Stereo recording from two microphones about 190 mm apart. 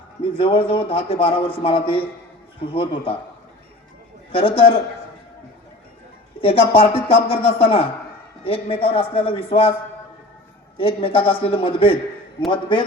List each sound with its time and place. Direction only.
0.3 s a man's voice: 30° left (ahead or behind)
4.3 s a man's voice: 30° left (ahead or behind)
6.4 s a man's voice: 30° left (ahead or behind)
10.8 s a man's voice: 30° left (ahead or behind)